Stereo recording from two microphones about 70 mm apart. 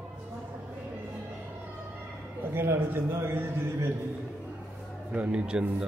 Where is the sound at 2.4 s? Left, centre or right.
Right.